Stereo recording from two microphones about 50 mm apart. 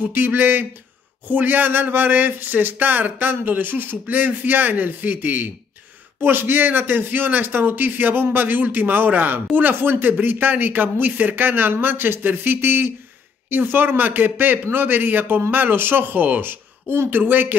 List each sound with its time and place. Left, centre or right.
0.0 s a man's voice: right